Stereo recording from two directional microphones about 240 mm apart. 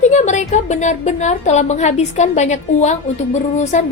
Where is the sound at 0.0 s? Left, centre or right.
Left.